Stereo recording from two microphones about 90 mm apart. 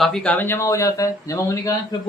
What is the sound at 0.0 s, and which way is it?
Speech, 5° left (ahead or behind).